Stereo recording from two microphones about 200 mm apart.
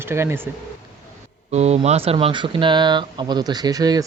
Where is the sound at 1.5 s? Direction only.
35° right (ahead or behind).